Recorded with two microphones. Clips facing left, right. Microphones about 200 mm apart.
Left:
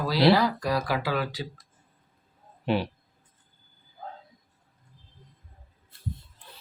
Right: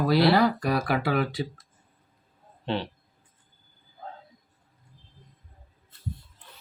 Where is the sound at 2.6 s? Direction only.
10° left (ahead or behind).